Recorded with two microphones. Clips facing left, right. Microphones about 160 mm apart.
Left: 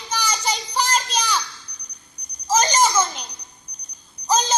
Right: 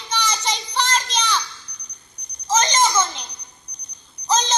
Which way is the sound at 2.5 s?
10° left (ahead or behind).